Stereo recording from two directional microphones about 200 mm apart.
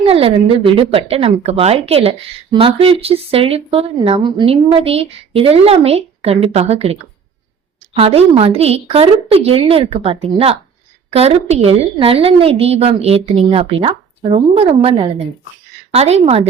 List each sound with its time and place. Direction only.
0.0 s a woman's voice: 30° right (ahead or behind)